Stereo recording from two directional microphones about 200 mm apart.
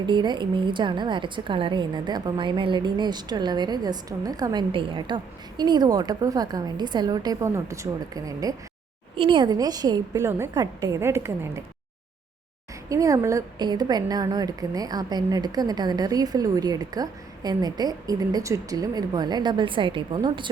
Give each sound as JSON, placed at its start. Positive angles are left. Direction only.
{"t": 0.0, "sound": "a woman's voice", "side_deg": -20}
{"t": 12.9, "sound": "a woman's voice", "side_deg": -15}